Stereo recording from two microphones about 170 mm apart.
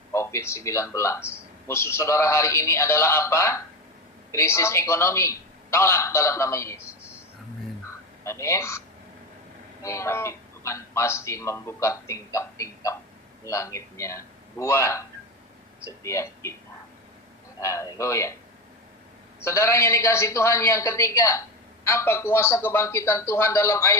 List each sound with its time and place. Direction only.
0.1 s a man's voice: 15° left (ahead or behind)
7.9 s a sound: 15° left (ahead or behind)
9.8 s a man's voice: 15° left (ahead or behind)
17.6 s a man's voice: 15° left (ahead or behind)
19.4 s a man's voice: 15° left (ahead or behind)